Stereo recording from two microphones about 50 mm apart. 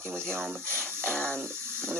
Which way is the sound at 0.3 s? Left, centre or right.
Right.